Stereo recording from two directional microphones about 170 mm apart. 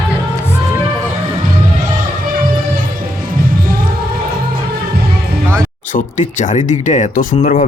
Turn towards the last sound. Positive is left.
turn(degrees=50)  # may be behind; listen again after turning